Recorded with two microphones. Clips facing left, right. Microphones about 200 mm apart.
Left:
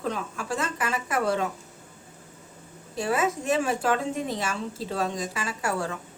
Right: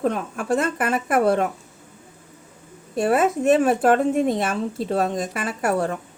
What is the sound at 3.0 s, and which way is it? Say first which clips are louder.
Speech: right 7 dB; 60° right (ahead or behind).